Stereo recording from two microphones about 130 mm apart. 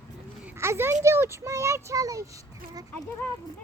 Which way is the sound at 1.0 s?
20° right (ahead or behind).